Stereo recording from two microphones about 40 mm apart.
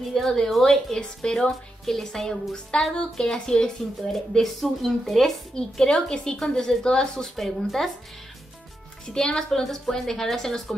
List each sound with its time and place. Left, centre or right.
0.1 s a woman's voice: centre
4.1 s speech: centre
5.5 s a woman's voice: centre
9.0 s a woman's voice: centre